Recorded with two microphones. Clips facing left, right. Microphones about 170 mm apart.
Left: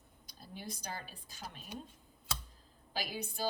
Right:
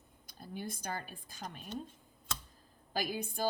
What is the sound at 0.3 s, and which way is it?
Speech, 50° right (ahead or behind).